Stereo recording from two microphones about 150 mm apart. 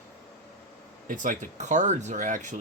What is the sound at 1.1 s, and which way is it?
Speech, 65° right (ahead or behind).